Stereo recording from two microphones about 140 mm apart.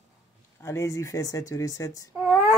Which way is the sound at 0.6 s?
20° left (ahead or behind).